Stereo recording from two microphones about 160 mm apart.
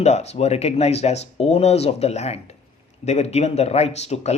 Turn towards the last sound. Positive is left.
turn(degrees=45)  # may be behind; listen again after turning